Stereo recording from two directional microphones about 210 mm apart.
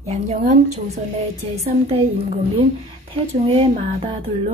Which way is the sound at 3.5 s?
25° right (ahead or behind).